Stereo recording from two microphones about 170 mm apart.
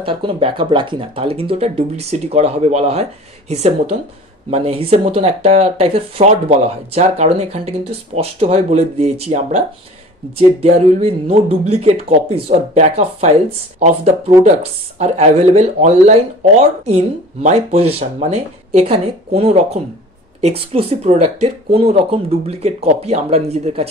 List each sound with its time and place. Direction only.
0.0 s speech: 30° right (ahead or behind)
10.6 s speech: 35° right (ahead or behind)